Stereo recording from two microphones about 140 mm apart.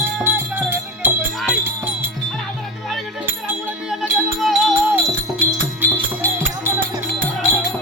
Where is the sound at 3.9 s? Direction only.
Centre (ahead or behind).